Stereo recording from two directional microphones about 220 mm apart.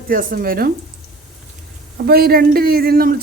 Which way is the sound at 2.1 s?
45° right (ahead or behind).